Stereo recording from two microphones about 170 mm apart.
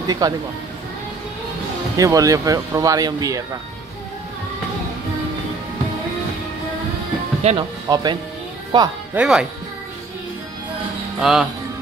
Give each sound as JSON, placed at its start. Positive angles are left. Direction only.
{"t": 0.0, "sound": "speech", "side_deg": -25}
{"t": 2.0, "sound": "speech", "side_deg": -20}
{"t": 7.4, "sound": "speech", "side_deg": -25}
{"t": 9.1, "sound": "speech", "side_deg": -5}
{"t": 11.1, "sound": "speech", "side_deg": -5}